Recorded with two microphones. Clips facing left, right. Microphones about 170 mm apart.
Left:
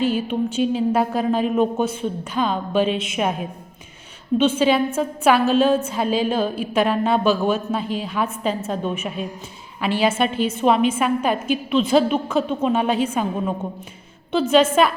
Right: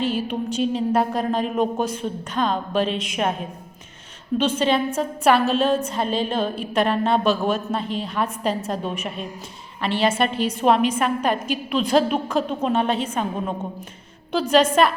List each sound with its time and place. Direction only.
0.0 s a woman's voice: centre (ahead or behind)
4.4 s a woman's voice: 5° left (ahead or behind)
14.3 s a woman's voice: 5° left (ahead or behind)